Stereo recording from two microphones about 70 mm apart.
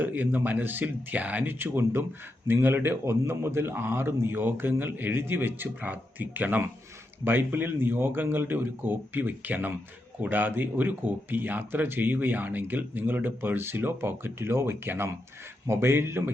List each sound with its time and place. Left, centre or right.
0.0 s a man's voice: right